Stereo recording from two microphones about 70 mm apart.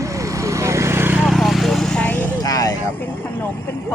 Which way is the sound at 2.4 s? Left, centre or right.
Left.